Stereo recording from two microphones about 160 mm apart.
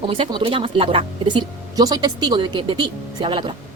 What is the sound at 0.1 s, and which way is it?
Speech, 30° right (ahead or behind).